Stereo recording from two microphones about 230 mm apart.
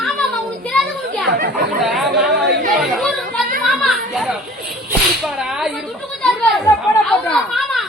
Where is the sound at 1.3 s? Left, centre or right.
Right.